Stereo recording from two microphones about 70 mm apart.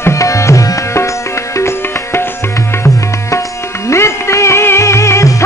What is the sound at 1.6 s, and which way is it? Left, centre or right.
Music, left.